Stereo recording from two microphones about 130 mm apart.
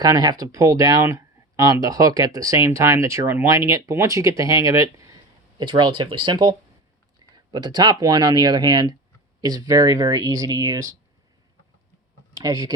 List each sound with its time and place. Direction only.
0.0 s speech: 30° right (ahead or behind)
12.3 s speech: 30° right (ahead or behind)